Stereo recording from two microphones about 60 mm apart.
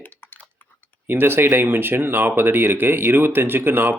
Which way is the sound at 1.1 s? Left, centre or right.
Right.